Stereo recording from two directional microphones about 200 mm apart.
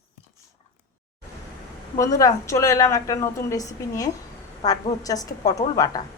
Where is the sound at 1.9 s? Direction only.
15° left (ahead or behind).